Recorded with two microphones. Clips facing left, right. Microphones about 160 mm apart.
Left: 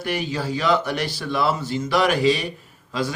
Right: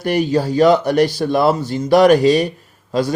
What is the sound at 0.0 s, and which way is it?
A man's voice, 40° right (ahead or behind).